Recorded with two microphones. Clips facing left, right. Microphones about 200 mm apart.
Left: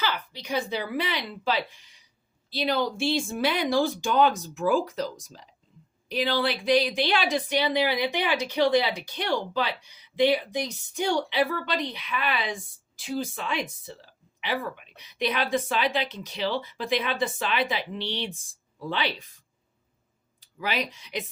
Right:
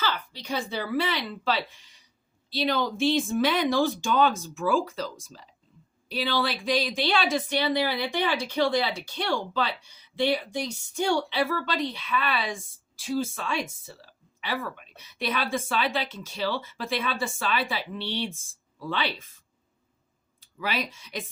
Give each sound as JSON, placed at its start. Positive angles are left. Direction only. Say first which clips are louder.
{"t": 0.0, "sound": "a woman's voice", "louder": "even", "side_deg": 15}
{"t": 20.4, "sound": "speech", "louder": "left 1 dB", "side_deg": 15}